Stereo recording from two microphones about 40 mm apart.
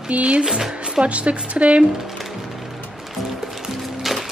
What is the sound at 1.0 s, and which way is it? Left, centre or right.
Speech, right.